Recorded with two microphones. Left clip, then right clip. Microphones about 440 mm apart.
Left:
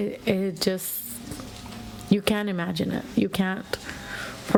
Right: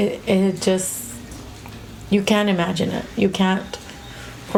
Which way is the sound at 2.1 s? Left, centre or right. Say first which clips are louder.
Right 7 dB; left.